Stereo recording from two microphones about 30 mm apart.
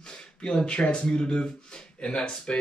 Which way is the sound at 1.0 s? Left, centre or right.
Left.